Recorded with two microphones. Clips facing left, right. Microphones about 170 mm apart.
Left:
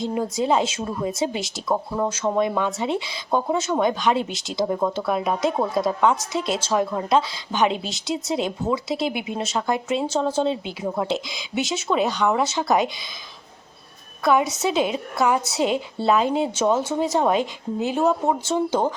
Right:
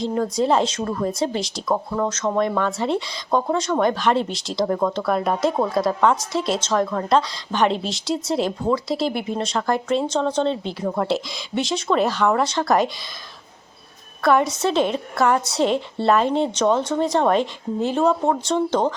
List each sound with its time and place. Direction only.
0.0 s speech: centre (ahead or behind)
14.2 s speech: centre (ahead or behind)